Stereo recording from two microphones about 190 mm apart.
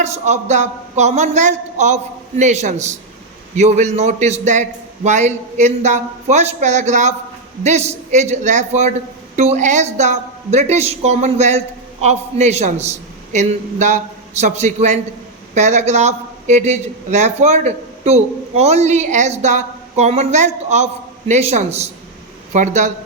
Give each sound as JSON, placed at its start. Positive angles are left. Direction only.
{"t": 0.0, "sound": "a man's voice", "side_deg": -35}